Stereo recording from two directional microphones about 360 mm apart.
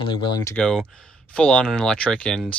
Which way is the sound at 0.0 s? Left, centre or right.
Centre.